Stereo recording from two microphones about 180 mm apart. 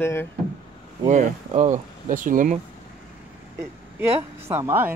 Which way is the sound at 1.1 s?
40° right (ahead or behind).